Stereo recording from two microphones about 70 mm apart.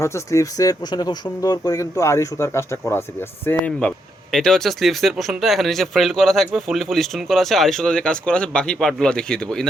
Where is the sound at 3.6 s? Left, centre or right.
Centre.